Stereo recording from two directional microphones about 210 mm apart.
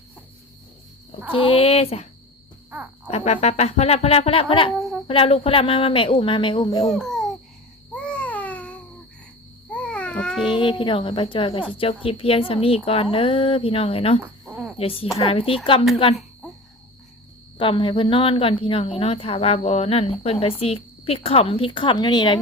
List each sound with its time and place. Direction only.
1.3 s a woman's voice: 25° left (ahead or behind)
3.1 s a woman's voice: 30° left (ahead or behind)
4.8 s a sound: centre (ahead or behind)
5.0 s a woman's voice: 25° left (ahead or behind)
6.9 s speech: centre (ahead or behind)
7.9 s babbling: 5° left (ahead or behind)
10.4 s a woman's voice: 25° left (ahead or behind)
14.2 s cricket: 10° right (ahead or behind)
14.8 s a woman's voice: 25° left (ahead or behind)
17.6 s a woman's voice: 25° left (ahead or behind)